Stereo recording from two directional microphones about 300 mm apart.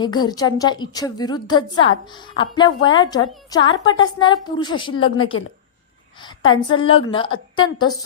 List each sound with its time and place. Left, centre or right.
0.0 s a woman's voice: centre
5.1 s a woman's voice: left
6.2 s a woman's voice: centre